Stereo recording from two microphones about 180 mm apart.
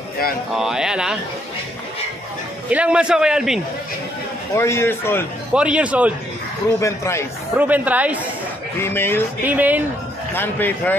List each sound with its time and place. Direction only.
0.6 s a man's voice: 5° right (ahead or behind)
2.7 s a man's voice: 5° right (ahead or behind)
4.6 s speech: 15° left (ahead or behind)
5.5 s a man's voice: 5° right (ahead or behind)
6.8 s speech: 15° left (ahead or behind)
7.5 s a man's voice: 10° right (ahead or behind)
8.8 s speech: 10° left (ahead or behind)
9.4 s a man's voice: 10° right (ahead or behind)
10.3 s speech: 10° left (ahead or behind)